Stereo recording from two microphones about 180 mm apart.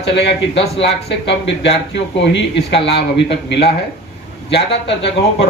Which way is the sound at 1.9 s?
75° left (ahead or behind).